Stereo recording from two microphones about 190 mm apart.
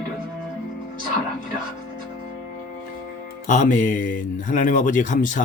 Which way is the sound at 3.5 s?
40° left (ahead or behind).